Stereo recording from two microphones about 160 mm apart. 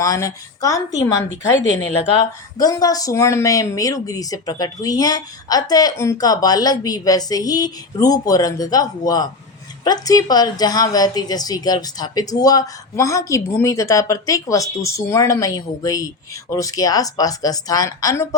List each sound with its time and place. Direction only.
0.0 s a woman's voice: 20° left (ahead or behind)
2.6 s a woman's voice: 25° left (ahead or behind)